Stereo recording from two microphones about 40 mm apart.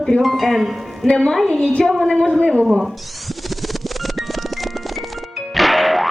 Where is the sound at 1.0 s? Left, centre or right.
Centre.